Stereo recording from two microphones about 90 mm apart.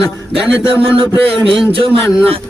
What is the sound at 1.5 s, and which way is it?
Speech, 90° right.